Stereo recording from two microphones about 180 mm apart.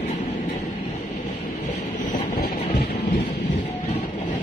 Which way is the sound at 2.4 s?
55° left (ahead or behind).